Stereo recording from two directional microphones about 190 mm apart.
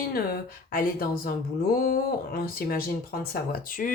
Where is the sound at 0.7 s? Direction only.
50° left (ahead or behind).